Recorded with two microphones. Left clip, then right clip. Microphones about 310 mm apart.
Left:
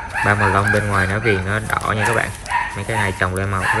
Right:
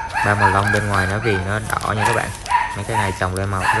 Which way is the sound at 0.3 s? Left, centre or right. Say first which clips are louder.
Even; centre.